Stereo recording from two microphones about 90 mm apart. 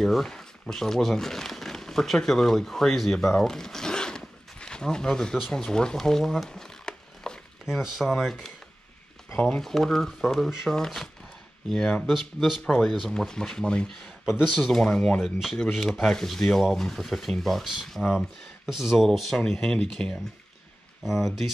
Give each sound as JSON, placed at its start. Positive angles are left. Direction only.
{"t": 0.0, "sound": "speech", "side_deg": 5}
{"t": 9.3, "sound": "speech", "side_deg": 20}
{"t": 9.6, "sound": "speech", "side_deg": 5}